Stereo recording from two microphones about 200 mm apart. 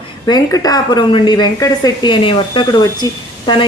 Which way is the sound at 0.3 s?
20° left (ahead or behind).